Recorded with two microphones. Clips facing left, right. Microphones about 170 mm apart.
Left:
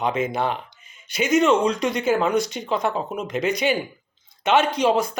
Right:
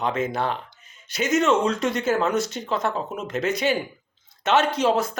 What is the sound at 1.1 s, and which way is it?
Speech, centre (ahead or behind).